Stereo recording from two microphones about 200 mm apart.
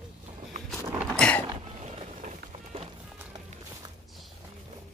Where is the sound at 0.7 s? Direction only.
5° left (ahead or behind).